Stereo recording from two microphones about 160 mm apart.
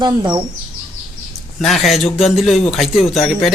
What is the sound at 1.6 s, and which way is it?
Speech, centre (ahead or behind).